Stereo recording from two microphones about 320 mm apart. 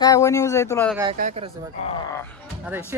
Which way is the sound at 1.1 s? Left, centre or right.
Right.